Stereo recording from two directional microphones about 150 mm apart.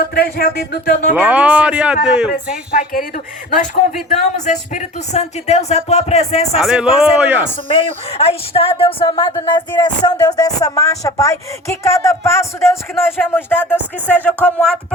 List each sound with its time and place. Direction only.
0.1 s speech: 80° left
1.1 s speech: 10° right (ahead or behind)
2.7 s speech: 70° left (ahead or behind)
4.1 s speech: 55° left (ahead or behind)
6.6 s a man's voice: 5° right (ahead or behind)
7.7 s speech: 40° left (ahead or behind); by 14.7 s 10° left (ahead or behind)